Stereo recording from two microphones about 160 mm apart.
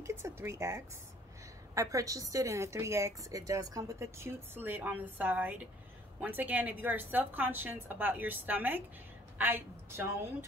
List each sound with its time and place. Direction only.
0.0 s a woman's voice: 15° right (ahead or behind)